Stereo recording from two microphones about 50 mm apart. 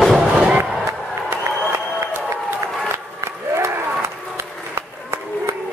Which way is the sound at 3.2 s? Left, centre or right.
Right.